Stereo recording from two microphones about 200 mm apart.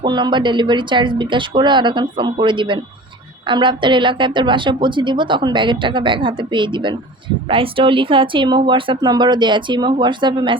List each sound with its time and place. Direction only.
0.0 s a woman's voice: 20° right (ahead or behind)